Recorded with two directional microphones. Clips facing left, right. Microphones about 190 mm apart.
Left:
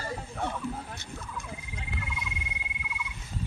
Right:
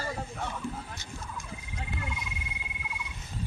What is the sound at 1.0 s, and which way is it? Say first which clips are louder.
Turkey: left 1 dB; 60° left (ahead or behind).